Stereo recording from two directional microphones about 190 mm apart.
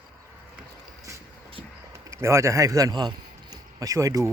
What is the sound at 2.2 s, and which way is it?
A man's voice, 15° right (ahead or behind).